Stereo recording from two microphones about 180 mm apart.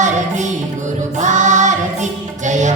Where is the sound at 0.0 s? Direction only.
45° right (ahead or behind).